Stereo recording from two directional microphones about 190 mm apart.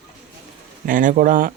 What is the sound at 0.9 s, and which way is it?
Speech, 45° right (ahead or behind).